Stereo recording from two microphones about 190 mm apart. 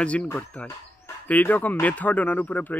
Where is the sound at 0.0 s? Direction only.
5° left (ahead or behind).